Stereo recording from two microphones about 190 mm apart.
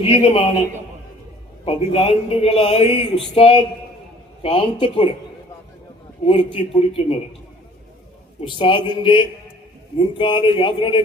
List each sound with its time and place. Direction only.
0.0 s a man's voice: 30° left (ahead or behind)
1.6 s a man's voice: 30° left (ahead or behind)
6.2 s a man's voice: 30° left (ahead or behind)
8.4 s a man's voice: 25° left (ahead or behind)